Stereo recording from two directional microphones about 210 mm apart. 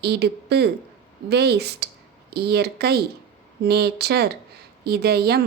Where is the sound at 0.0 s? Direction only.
50° right (ahead or behind).